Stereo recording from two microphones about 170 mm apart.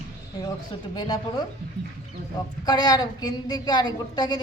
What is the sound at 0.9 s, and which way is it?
Speech, 25° left (ahead or behind).